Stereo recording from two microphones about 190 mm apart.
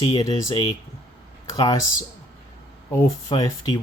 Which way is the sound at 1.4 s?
20° left (ahead or behind).